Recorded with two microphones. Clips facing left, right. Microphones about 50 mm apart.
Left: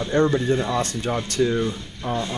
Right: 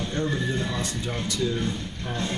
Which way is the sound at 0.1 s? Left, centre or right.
Left.